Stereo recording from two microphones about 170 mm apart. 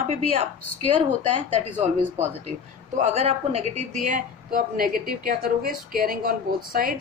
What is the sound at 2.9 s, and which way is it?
Speech, 40° right (ahead or behind).